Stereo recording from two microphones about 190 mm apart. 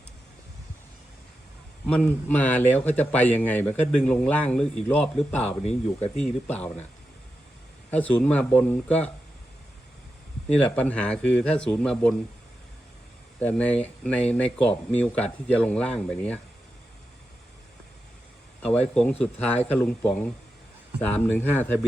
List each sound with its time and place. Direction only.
1.9 s a man's voice: 5° left (ahead or behind)
5.6 s speech: 35° left (ahead or behind)
6.2 s a man's voice: 10° left (ahead or behind)
7.9 s a man's voice: 10° left (ahead or behind)
10.6 s a man's voice: 5° left (ahead or behind)
13.4 s a man's voice: 5° left (ahead or behind)
19.2 s a man's voice: 10° left (ahead or behind)